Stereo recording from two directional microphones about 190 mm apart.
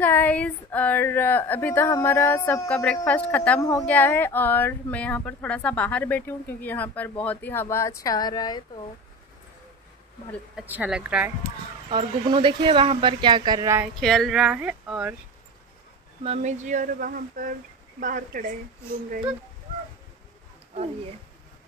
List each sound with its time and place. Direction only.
0.0 s speech: 10° left (ahead or behind)
10.5 s speech: 10° right (ahead or behind)
11.9 s a woman's voice: 25° right (ahead or behind)
13.9 s speech: centre (ahead or behind)
16.3 s speech: 40° right (ahead or behind)